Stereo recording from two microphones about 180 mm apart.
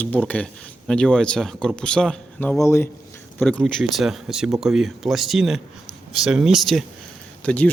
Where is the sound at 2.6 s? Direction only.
15° left (ahead or behind).